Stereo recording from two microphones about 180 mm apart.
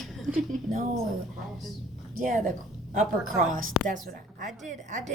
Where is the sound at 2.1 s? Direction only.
45° right (ahead or behind).